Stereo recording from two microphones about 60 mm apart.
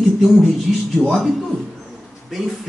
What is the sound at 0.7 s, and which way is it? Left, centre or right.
Speech, centre.